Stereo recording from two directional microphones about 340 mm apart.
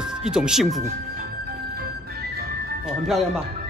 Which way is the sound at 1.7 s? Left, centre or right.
Right.